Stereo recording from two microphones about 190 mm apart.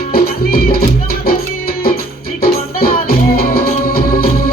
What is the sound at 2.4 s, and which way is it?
Music, 50° left (ahead or behind).